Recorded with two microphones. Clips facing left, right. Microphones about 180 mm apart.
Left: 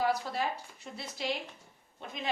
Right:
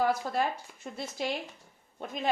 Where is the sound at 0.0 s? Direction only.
50° right (ahead or behind).